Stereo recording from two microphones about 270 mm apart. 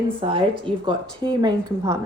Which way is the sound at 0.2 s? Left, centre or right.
Centre.